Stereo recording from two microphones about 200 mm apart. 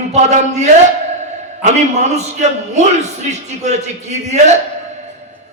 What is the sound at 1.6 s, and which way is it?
A man's voice, 35° right (ahead or behind).